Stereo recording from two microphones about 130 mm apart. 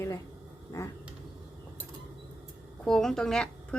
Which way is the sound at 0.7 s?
20° left (ahead or behind).